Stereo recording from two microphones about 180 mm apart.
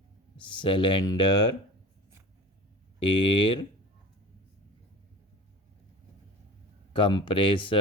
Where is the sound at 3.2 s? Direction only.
25° left (ahead or behind).